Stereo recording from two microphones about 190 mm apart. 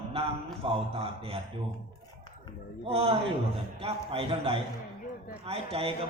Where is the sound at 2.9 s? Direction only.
30° right (ahead or behind).